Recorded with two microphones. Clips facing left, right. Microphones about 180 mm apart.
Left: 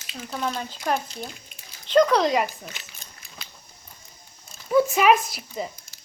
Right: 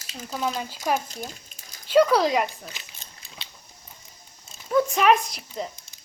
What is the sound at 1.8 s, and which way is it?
Speech, 5° right (ahead or behind).